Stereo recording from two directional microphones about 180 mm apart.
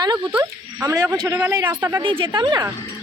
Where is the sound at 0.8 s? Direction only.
20° right (ahead or behind).